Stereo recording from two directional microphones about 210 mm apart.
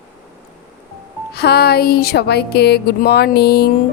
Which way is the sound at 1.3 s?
50° left (ahead or behind).